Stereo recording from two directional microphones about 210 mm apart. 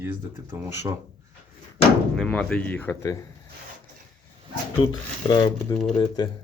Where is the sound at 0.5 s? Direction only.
10° right (ahead or behind).